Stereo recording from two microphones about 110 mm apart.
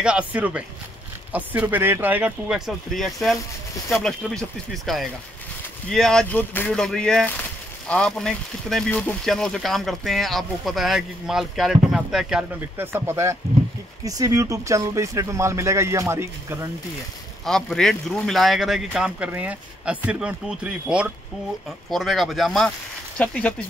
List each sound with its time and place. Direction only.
0.0 s speech: 10° right (ahead or behind); by 6.2 s 5° left (ahead or behind)
6.2 s speech: 15° left (ahead or behind); by 12.4 s 5° right (ahead or behind)
12.5 s speech: 20° right (ahead or behind)
17.5 s speech: 5° left (ahead or behind)
21.9 s speech: centre (ahead or behind)
23.1 s speech: 10° left (ahead or behind)